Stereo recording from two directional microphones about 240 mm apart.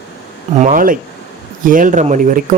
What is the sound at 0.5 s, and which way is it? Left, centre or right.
Speech, right.